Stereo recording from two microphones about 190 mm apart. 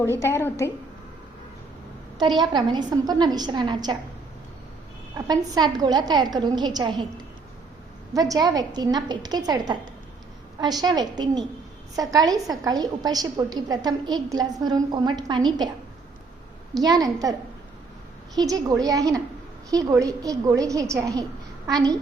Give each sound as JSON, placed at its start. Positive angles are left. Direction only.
{"t": 0.0, "sound": "a woman's voice", "side_deg": 15}
{"t": 2.4, "sound": "a woman's voice", "side_deg": -20}
{"t": 5.1, "sound": "a woman's voice", "side_deg": -20}
{"t": 8.1, "sound": "a woman's voice", "side_deg": -20}
{"t": 10.6, "sound": "a woman's voice", "side_deg": -20}
{"t": 16.7, "sound": "a woman's voice", "side_deg": -20}
{"t": 18.3, "sound": "a woman's voice", "side_deg": -20}